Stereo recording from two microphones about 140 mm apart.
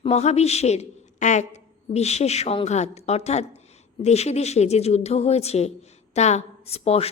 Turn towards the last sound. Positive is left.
turn(degrees=45)  # may be behind; listen again after turning